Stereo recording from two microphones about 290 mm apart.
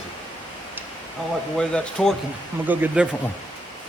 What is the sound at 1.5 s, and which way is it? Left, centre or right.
Speech, centre.